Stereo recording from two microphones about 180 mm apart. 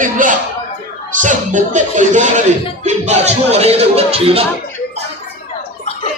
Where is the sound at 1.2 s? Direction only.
45° right (ahead or behind).